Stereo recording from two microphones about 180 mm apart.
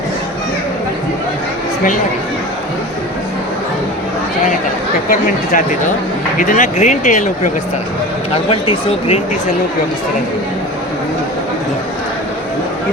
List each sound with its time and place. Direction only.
5.2 s speech: 50° left (ahead or behind)
8.4 s speech: 30° left (ahead or behind)